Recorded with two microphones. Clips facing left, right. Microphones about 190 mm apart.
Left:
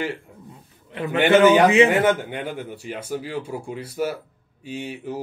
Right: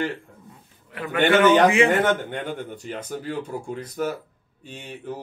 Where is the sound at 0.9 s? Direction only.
25° left (ahead or behind).